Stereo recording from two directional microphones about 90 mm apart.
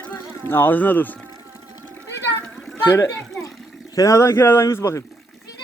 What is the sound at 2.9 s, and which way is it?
Speech, 30° left (ahead or behind).